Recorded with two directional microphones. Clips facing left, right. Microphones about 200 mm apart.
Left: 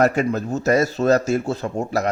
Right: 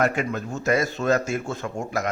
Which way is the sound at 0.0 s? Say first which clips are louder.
Left 5 dB; 40° left (ahead or behind).